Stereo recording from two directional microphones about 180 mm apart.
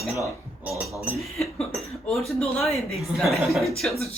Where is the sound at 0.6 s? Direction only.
10° right (ahead or behind).